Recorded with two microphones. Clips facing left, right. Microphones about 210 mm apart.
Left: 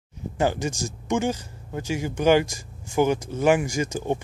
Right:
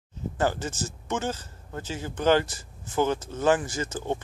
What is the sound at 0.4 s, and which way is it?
Speech, 15° left (ahead or behind).